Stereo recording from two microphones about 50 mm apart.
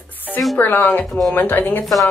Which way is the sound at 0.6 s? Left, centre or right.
Left.